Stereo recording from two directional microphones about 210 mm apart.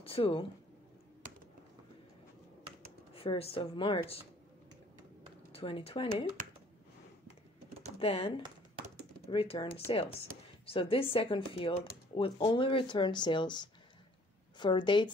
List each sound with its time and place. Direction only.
0.0 s speech: 25° left (ahead or behind)
3.2 s speech: 25° left (ahead or behind)
5.5 s speech: 25° left (ahead or behind)
8.0 s speech: 30° left (ahead or behind)
9.3 s speech: 25° left (ahead or behind)